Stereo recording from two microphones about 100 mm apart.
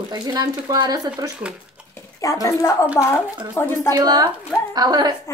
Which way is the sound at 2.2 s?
35° left (ahead or behind).